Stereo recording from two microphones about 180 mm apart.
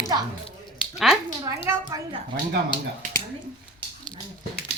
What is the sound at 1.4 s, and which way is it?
Speech, 15° right (ahead or behind).